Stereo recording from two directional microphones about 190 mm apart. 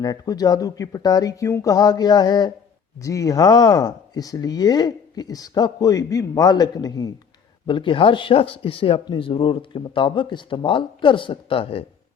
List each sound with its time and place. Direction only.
0.0 s speech: 20° left (ahead or behind)